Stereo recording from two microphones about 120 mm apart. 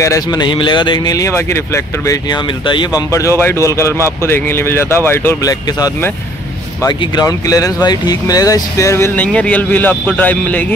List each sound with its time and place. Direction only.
0.0 s a man's voice: 30° left (ahead or behind)
1.1 s speech: 25° left (ahead or behind)
2.2 s a man's voice: 40° left (ahead or behind)
3.1 s speech: 25° left (ahead or behind)
5.4 s a man's voice: 30° left (ahead or behind)
6.9 s speech: 35° left (ahead or behind); by 10.7 s 15° left (ahead or behind)